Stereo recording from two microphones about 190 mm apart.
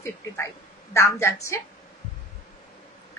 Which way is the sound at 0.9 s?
15° left (ahead or behind).